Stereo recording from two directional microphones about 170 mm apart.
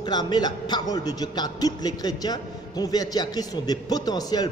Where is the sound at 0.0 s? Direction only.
25° left (ahead or behind).